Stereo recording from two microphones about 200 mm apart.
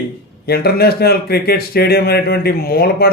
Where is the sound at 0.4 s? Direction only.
50° left (ahead or behind).